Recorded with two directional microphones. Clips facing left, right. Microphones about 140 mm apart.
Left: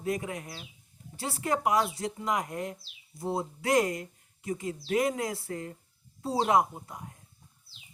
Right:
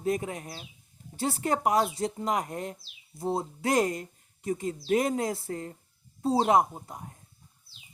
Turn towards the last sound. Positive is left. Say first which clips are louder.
# right 1 dB
turn(degrees=-35)  # may be behind; listen again after turning